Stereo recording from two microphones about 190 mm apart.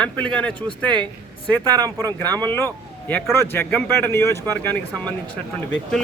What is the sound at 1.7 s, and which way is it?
Speech, 20° right (ahead or behind).